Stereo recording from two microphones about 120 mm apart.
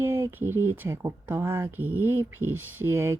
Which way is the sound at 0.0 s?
20° right (ahead or behind).